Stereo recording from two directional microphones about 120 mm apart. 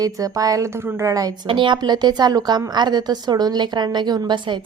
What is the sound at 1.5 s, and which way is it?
A woman's voice, 45° right (ahead or behind).